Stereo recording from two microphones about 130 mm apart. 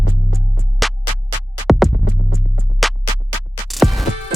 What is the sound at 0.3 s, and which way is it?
Music, centre (ahead or behind).